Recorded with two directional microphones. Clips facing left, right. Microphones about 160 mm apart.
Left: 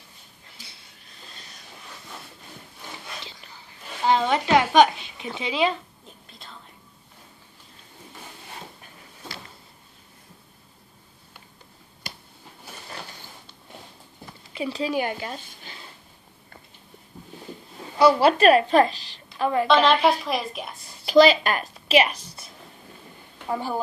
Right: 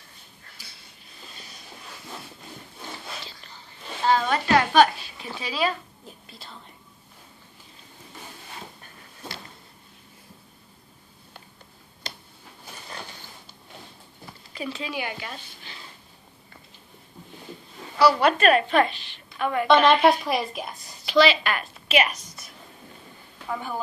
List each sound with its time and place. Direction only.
3.3 s whispering: 15° left (ahead or behind)
4.0 s a woman's voice: 20° left (ahead or behind)
6.0 s whispering: 5° right (ahead or behind)
12.6 s a sound: 5° left (ahead or behind)
14.7 s a woman's voice: 40° left (ahead or behind)
17.9 s a woman's voice: 25° left (ahead or behind)
19.9 s a woman's voice: centre (ahead or behind)
21.0 s a woman's voice: 40° left (ahead or behind); by 23.8 s 25° left (ahead or behind)